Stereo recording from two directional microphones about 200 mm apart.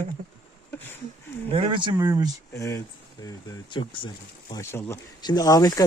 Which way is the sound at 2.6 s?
15° left (ahead or behind).